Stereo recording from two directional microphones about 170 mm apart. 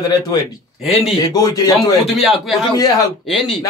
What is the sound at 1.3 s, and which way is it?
Speech, 20° left (ahead or behind).